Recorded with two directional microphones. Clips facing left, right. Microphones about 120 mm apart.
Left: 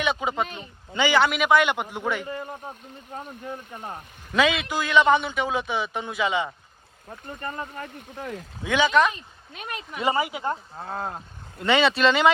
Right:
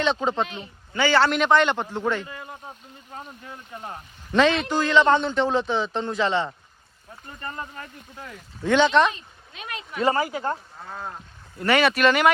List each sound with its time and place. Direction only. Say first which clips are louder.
0.0 s a man's voice: right 2 dB; 10° left (ahead or behind)
3.4 s speech: left 3 dB; 35° left (ahead or behind)
4.3 s a man's voice: right 3 dB; 5° left (ahead or behind)
8.1 s speech: left 7 dB; 45° left (ahead or behind)
8.6 s a man's voice: right 2 dB; 5° left (ahead or behind)
10.1 s speech: right 1 dB; 20° left (ahead or behind)
10.8 s speech: left 4 dB; 45° left (ahead or behind)
11.6 s speech: right 1 dB; 20° left (ahead or behind)